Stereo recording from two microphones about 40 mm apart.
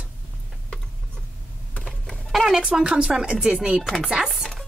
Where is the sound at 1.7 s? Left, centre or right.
Left.